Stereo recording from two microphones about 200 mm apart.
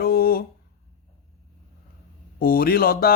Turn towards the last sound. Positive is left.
turn(degrees=50)  # may be behind; listen again after turning